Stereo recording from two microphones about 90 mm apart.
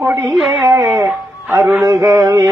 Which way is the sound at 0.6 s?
30° right (ahead or behind).